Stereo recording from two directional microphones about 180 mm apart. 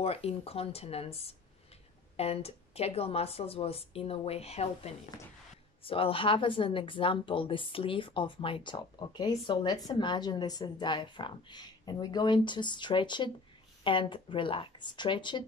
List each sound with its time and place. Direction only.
0.0 s speech: 35° left (ahead or behind)